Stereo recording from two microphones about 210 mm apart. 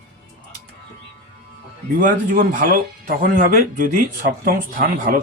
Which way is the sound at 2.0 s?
40° right (ahead or behind).